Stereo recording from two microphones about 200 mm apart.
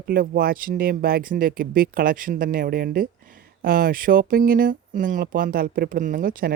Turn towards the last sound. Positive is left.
turn(degrees=-45)  # may be behind; listen again after turning